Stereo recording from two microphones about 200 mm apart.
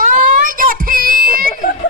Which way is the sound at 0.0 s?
45° right (ahead or behind).